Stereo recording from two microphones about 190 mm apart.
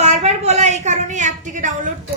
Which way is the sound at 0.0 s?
35° right (ahead or behind).